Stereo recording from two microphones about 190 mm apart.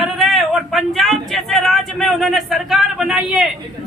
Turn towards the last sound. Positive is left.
turn(degrees=0)  # may be behind; listen again after turning